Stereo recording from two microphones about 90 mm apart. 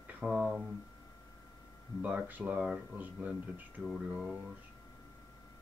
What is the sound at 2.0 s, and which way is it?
Speech, 15° right (ahead or behind).